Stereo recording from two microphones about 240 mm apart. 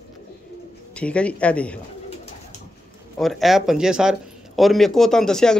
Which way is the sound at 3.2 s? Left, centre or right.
Centre.